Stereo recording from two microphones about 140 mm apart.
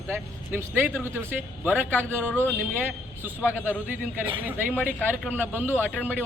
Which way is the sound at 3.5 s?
10° right (ahead or behind).